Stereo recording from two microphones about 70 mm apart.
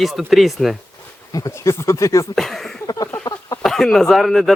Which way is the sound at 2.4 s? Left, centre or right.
Centre.